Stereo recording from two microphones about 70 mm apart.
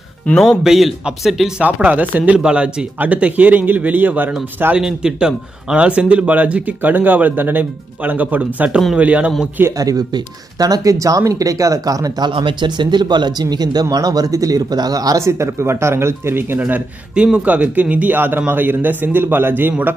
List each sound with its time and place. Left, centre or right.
0.4 s speech: centre
1.6 s speech: right
4.7 s speech: centre
9.8 s speech: right
15.1 s speech: right